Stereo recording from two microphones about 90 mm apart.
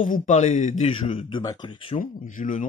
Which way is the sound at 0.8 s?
90° left.